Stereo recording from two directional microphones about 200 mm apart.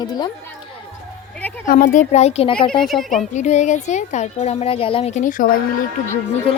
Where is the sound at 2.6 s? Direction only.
5° left (ahead or behind).